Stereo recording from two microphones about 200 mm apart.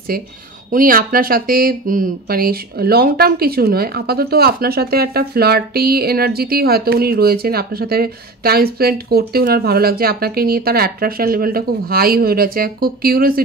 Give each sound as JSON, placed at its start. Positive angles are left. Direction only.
{"t": 0.7, "sound": "speech", "side_deg": -45}